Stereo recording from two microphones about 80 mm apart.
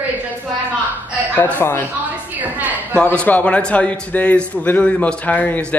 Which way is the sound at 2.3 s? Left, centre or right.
Right.